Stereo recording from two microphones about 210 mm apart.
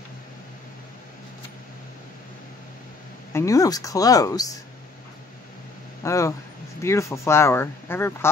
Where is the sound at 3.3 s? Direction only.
15° left (ahead or behind).